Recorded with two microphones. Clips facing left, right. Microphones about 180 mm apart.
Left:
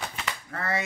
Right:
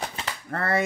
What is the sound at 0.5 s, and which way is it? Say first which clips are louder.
Speech: right 6 dB; 55° right (ahead or behind).